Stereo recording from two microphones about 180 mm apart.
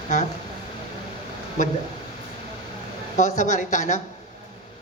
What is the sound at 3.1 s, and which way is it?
Speech, 45° left (ahead or behind).